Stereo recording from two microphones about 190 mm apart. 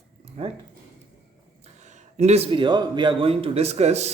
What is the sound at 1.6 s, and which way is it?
A man's voice, 40° right (ahead or behind).